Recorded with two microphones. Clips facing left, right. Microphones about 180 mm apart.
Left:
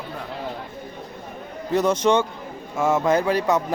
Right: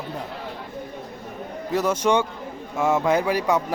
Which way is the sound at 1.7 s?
10° right (ahead or behind).